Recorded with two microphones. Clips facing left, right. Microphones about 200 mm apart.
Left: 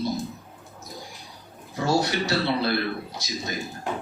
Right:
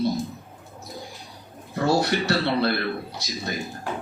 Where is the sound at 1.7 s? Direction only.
60° right (ahead or behind).